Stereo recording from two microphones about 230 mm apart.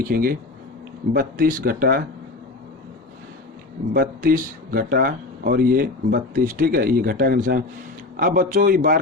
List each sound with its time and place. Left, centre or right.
0.0 s speech: right
3.9 s speech: right